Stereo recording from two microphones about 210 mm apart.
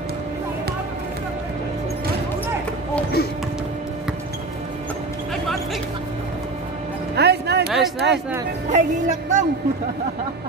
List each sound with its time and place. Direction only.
7.2 s music: 50° right (ahead or behind)
7.7 s a sound: centre (ahead or behind)
8.7 s music: 35° right (ahead or behind)